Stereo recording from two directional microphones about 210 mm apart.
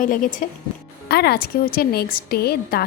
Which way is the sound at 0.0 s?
40° left (ahead or behind).